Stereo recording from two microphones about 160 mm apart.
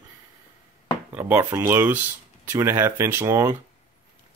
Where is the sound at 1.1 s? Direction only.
10° right (ahead or behind).